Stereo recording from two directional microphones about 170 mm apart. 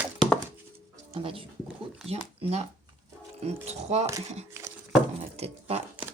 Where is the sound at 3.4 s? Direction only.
40° right (ahead or behind).